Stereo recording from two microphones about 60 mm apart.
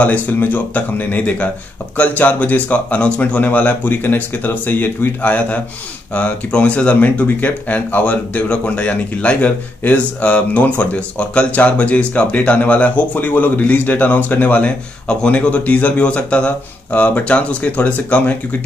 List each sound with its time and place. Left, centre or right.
0.0 s speech: left